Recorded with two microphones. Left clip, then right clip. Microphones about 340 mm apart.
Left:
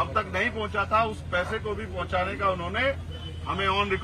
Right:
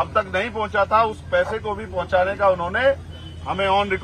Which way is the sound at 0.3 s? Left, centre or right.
Centre.